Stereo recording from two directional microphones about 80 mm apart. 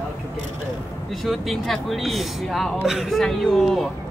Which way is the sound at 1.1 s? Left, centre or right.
Centre.